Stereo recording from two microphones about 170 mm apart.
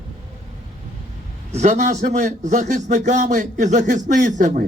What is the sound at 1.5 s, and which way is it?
A man's voice, 45° right (ahead or behind).